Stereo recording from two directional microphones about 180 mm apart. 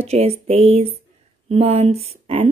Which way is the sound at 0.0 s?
35° right (ahead or behind).